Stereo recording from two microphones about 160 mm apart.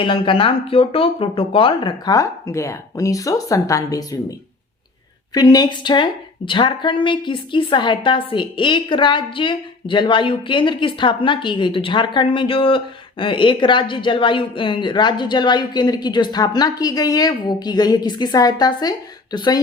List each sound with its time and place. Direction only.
0.0 s a woman's voice: 30° left (ahead or behind)